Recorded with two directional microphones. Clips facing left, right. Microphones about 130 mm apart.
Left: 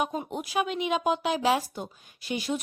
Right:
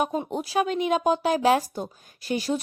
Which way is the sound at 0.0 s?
40° right (ahead or behind).